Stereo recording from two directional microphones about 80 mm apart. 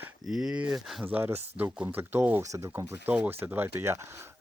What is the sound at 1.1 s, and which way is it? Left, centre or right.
Speech, right.